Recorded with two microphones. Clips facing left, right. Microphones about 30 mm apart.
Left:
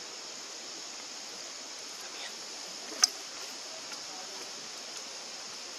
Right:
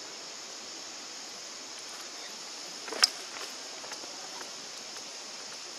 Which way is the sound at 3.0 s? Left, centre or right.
Right.